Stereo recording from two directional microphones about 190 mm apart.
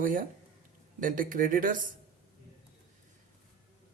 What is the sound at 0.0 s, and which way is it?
Speech, 45° right (ahead or behind).